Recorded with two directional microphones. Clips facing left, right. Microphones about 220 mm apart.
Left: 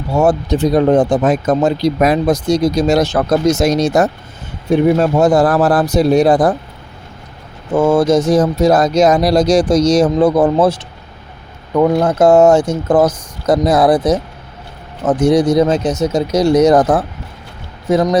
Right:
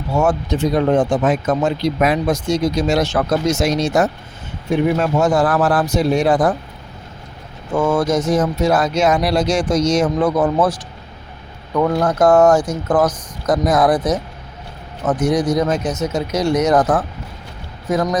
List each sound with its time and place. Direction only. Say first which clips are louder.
0.1 s speech: left 4 dB; 35° left (ahead or behind)
7.7 s speech: left 5 dB; 25° left (ahead or behind)